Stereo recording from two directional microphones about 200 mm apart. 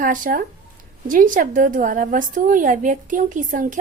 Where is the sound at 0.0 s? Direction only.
40° right (ahead or behind).